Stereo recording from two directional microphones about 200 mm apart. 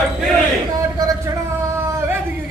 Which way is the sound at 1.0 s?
20° right (ahead or behind).